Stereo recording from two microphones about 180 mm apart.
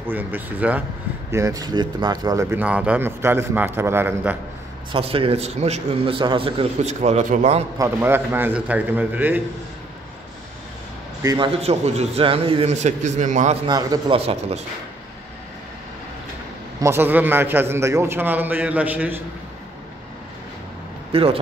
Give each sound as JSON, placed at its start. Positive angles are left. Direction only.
{"t": 0.0, "sound": "speech", "side_deg": -10}
{"t": 4.9, "sound": "a man's voice", "side_deg": -30}
{"t": 7.8, "sound": "speech", "side_deg": -10}
{"t": 11.2, "sound": "a man's voice", "side_deg": -25}
{"t": 13.7, "sound": "a man's voice", "side_deg": -20}
{"t": 14.1, "sound": "a man's voice", "side_deg": -35}
{"t": 16.8, "sound": "speech", "side_deg": -10}
{"t": 21.1, "sound": "speech", "side_deg": -30}